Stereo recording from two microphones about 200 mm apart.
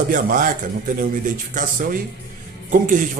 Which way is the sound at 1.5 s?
45° right (ahead or behind).